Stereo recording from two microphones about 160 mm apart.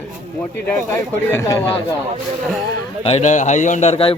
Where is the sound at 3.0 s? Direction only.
45° left (ahead or behind).